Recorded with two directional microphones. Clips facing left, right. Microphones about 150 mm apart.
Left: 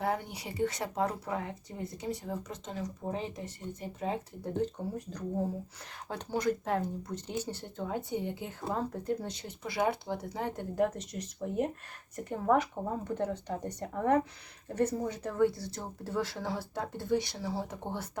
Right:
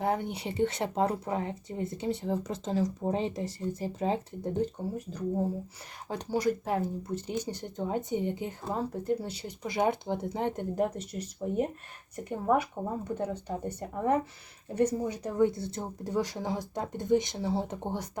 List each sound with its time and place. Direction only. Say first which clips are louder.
0.0 s speech: right 3 dB; 20° right (ahead or behind)
4.5 s speech: right 1 dB; 10° right (ahead or behind)
8.7 s speech: right 2 dB; 10° right (ahead or behind)